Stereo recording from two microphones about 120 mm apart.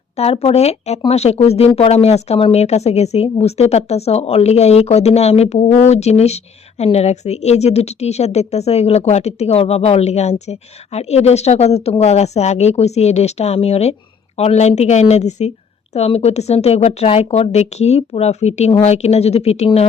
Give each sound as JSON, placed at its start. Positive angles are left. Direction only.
{"t": 0.2, "sound": "speech", "side_deg": 60}